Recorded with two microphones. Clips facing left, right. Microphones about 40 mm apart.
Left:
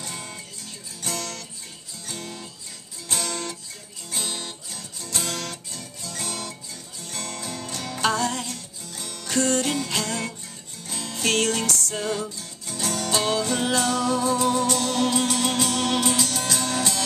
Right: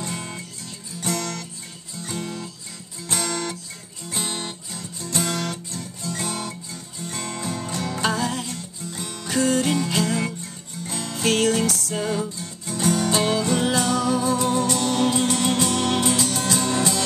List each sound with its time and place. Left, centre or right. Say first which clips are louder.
1.0 s music: right 4 dB; right
2.0 s guitar: right 5 dB; centre
3.1 s music: right 3 dB; centre
4.2 s guitar: right 3 dB; right
6.1 s music: right 3 dB; centre
8.9 s music: right 2 dB; right
9.3 s music: right 2 dB; centre
12.6 s music: right 6 dB; centre